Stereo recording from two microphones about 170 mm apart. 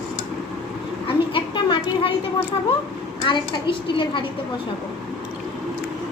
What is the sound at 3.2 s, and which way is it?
A child's voice, 30° left (ahead or behind).